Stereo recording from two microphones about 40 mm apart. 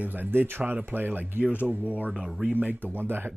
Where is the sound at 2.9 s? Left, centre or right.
Right.